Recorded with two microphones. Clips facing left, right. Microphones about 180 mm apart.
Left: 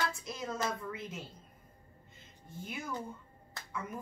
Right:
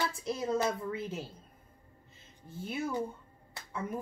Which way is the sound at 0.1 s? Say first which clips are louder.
Right 8 dB; 30° right (ahead or behind).